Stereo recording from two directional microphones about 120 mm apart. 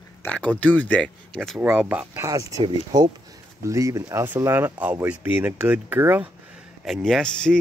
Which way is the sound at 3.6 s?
25° right (ahead or behind).